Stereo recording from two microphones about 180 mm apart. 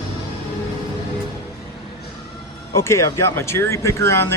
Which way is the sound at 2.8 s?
15° left (ahead or behind).